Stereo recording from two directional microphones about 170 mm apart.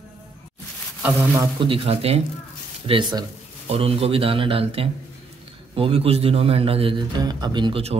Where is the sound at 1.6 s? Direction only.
30° right (ahead or behind).